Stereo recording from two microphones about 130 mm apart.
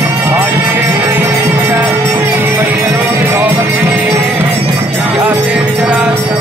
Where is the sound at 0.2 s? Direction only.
15° right (ahead or behind).